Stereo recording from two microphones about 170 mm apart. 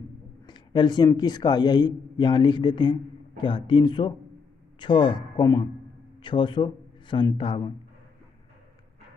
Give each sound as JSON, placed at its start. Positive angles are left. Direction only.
{"t": 0.5, "sound": "speech", "side_deg": 25}